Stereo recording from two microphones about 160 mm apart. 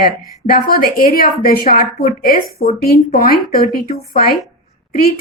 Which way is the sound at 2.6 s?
75° left (ahead or behind).